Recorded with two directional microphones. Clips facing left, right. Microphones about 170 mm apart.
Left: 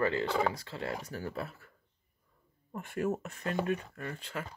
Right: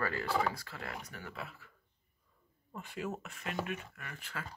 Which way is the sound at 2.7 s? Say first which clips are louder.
Left 7 dB; 50° left (ahead or behind).